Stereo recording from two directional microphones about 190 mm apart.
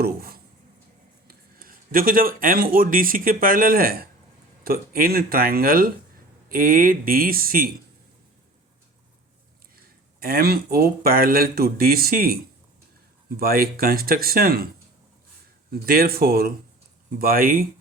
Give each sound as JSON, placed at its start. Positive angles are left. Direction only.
{"t": 0.0, "sound": "a sound", "side_deg": -55}
{"t": 1.3, "sound": "speech", "side_deg": -50}
{"t": 9.7, "sound": "speech", "side_deg": -55}
{"t": 15.7, "sound": "speech", "side_deg": -50}